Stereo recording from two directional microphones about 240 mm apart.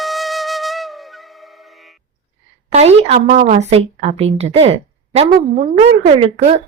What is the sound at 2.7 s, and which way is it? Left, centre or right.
A woman's voice, right.